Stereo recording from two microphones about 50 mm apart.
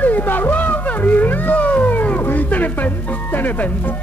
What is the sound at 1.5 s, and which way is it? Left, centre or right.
Cat, left.